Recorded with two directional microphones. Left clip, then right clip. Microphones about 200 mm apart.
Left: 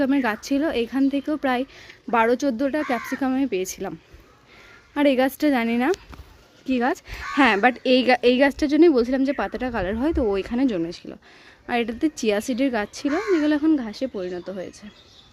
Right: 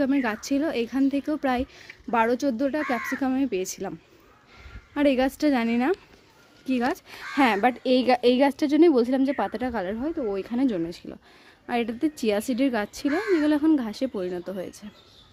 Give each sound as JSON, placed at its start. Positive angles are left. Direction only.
{"t": 0.0, "sound": "speech", "side_deg": 5}
{"t": 4.9, "sound": "speech", "side_deg": 0}
{"t": 10.0, "sound": "speech", "side_deg": 20}
{"t": 10.4, "sound": "speech", "side_deg": 5}